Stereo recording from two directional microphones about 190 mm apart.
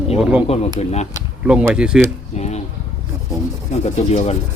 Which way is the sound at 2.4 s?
35° left (ahead or behind).